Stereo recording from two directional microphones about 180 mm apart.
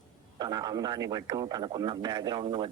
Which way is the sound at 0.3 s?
20° right (ahead or behind).